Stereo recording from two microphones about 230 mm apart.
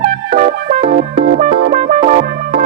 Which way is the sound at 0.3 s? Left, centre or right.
Right.